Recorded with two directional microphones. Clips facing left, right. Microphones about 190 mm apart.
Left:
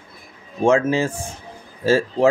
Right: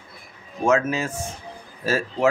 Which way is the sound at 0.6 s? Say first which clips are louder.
Left 4 dB; 30° left (ahead or behind).